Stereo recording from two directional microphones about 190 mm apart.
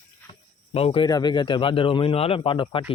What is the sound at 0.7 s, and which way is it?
Speech, 30° left (ahead or behind).